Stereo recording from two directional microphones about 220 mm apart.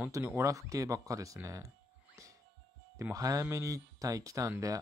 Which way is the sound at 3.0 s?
15° right (ahead or behind).